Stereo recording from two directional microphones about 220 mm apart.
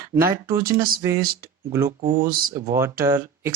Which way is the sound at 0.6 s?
40° right (ahead or behind).